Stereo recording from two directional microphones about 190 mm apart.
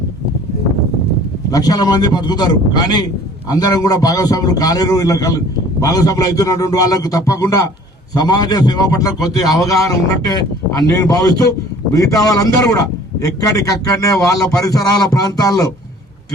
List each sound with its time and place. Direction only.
1.5 s a man's voice: 20° left (ahead or behind)
10.7 s a man's voice: 20° left (ahead or behind)